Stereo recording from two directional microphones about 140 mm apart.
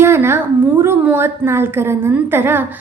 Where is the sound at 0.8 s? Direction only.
15° right (ahead or behind).